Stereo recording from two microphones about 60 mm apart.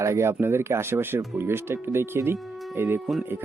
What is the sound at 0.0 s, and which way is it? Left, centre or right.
Speech, right.